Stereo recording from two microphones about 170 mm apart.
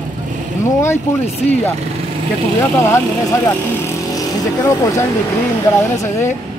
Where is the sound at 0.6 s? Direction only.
15° left (ahead or behind).